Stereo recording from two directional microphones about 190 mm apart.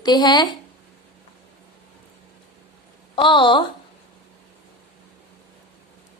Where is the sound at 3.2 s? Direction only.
25° left (ahead or behind).